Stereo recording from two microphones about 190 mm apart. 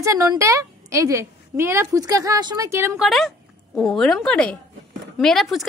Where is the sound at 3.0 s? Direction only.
Centre (ahead or behind).